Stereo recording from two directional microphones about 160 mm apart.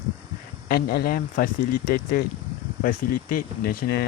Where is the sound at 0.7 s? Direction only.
75° left (ahead or behind).